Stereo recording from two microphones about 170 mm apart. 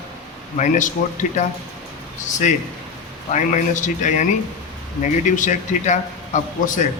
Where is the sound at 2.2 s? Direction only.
45° left (ahead or behind).